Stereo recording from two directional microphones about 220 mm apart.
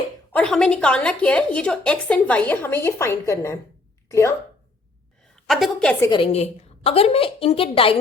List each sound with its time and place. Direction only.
0.3 s a woman's voice: 5° left (ahead or behind)
5.5 s a woman's voice: centre (ahead or behind)
6.1 s a woman's voice: 25° left (ahead or behind)